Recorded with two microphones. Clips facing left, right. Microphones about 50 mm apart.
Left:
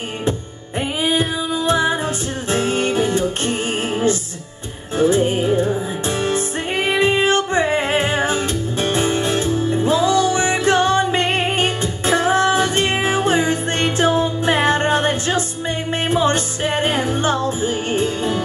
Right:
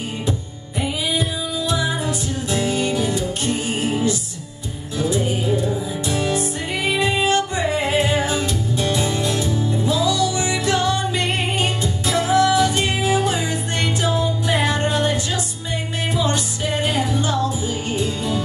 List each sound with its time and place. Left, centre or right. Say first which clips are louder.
0.7 s music: left 3 dB; left